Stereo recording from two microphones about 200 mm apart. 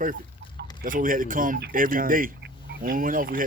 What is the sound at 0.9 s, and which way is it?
Speech, 40° right (ahead or behind).